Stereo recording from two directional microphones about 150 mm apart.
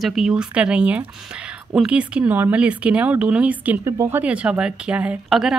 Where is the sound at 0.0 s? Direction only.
Centre (ahead or behind).